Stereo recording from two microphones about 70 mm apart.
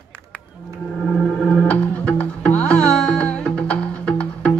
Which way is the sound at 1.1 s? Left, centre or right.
Centre.